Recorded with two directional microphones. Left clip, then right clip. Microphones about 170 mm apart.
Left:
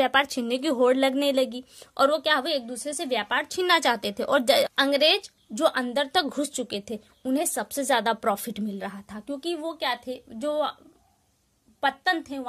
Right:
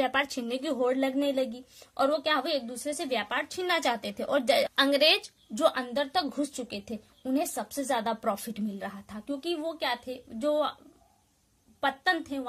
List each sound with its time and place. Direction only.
0.0 s a woman's voice: 40° left (ahead or behind)
4.7 s a woman's voice: 30° left (ahead or behind)
6.2 s a woman's voice: 60° left (ahead or behind); by 10.8 s 35° left (ahead or behind)
11.8 s a woman's voice: 30° left (ahead or behind)